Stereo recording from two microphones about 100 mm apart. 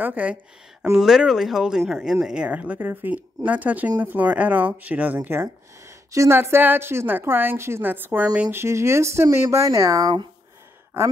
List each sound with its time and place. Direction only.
0.0 s a woman's voice: 15° right (ahead or behind); by 10.1 s 35° right (ahead or behind)